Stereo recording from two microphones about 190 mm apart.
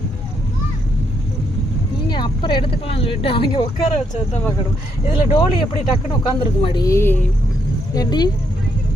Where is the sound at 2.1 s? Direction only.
25° left (ahead or behind).